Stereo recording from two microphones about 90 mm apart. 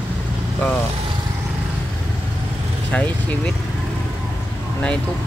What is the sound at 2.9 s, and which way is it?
Speech, 15° left (ahead or behind).